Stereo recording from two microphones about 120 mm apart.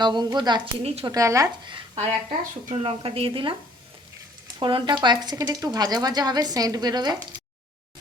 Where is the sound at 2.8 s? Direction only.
50° right (ahead or behind).